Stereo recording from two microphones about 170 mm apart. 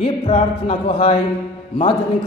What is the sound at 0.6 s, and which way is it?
Speech, 30° left (ahead or behind).